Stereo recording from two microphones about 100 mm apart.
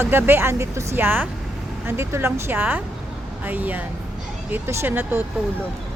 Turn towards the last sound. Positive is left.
turn(degrees=-20)  # may be behind; listen again after turning